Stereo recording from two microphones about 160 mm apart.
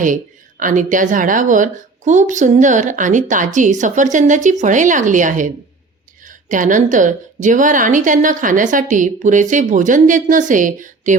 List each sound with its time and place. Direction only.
0.6 s a woman's voice: 55° right (ahead or behind)